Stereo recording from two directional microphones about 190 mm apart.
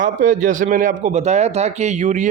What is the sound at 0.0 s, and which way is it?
A man's voice, 45° right (ahead or behind).